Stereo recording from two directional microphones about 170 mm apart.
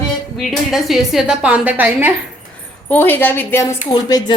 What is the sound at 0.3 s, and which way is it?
A woman's voice, centre (ahead or behind).